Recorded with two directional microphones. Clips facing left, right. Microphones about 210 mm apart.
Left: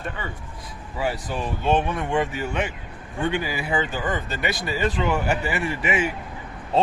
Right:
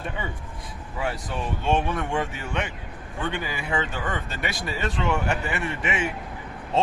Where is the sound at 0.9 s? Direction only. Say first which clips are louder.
Left 3 dB; 5° left (ahead or behind).